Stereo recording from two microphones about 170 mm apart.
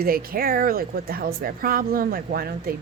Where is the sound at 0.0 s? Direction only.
60° right (ahead or behind).